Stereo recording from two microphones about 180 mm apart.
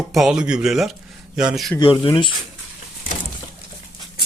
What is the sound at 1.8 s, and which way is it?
Speech, 25° left (ahead or behind).